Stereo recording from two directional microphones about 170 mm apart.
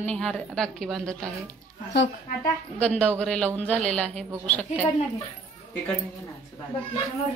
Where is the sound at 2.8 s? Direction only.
5° left (ahead or behind).